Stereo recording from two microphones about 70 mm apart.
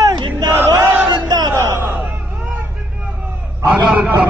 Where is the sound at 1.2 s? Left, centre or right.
Right.